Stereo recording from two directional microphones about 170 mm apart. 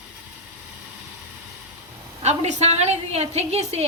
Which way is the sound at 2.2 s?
40° right (ahead or behind).